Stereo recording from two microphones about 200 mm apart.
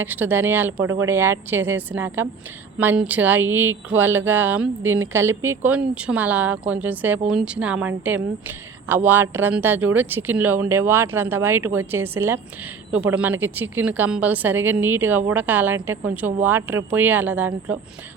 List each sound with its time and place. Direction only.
0.0 s a woman's voice: 10° right (ahead or behind)
0.8 s speech: 90° right
1.0 s a woman's voice: 10° right (ahead or behind)